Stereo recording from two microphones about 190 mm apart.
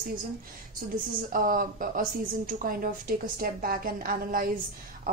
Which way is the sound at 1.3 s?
45° right (ahead or behind).